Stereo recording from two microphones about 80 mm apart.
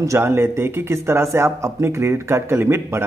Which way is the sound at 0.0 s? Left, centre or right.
Right.